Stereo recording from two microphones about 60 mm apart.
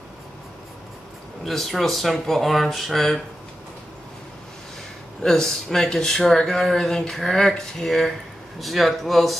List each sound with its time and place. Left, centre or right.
1.4 s speech: centre
5.2 s speech: centre